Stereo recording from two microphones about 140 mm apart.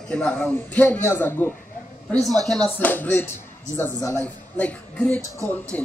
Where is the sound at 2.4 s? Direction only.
5° left (ahead or behind).